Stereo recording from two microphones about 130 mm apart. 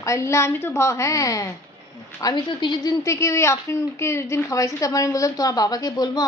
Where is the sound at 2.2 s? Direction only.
35° left (ahead or behind).